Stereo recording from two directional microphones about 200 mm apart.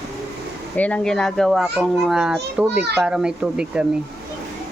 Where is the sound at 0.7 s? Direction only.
5° left (ahead or behind).